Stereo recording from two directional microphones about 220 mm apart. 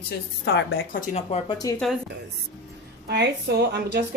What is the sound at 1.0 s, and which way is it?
Speech, 30° left (ahead or behind).